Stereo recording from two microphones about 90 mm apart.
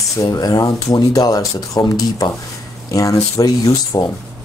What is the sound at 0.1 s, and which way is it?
Speech, 40° left (ahead or behind).